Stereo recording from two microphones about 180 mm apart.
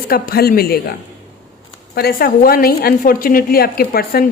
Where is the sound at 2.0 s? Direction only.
55° left (ahead or behind).